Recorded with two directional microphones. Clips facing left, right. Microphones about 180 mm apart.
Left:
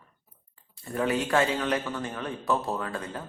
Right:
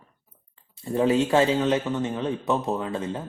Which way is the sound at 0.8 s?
25° right (ahead or behind).